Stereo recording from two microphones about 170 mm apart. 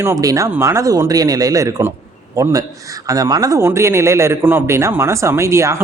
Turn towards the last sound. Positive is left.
turn(degrees=-15)  # may be behind; listen again after turning